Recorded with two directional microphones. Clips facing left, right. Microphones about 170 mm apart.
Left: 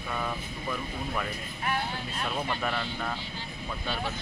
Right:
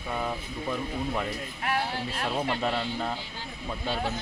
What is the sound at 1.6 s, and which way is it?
Speech, 70° right (ahead or behind).